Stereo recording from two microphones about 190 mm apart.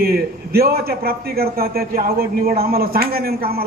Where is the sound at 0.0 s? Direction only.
55° right (ahead or behind).